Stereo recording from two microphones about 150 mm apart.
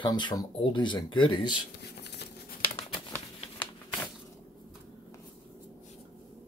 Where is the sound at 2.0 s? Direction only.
90° left.